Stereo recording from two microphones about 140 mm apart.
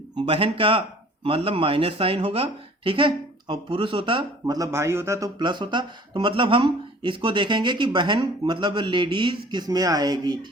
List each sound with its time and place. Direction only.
0.3 s speech: 40° right (ahead or behind); by 5.3 s 20° right (ahead or behind)
5.4 s speech: 35° right (ahead or behind)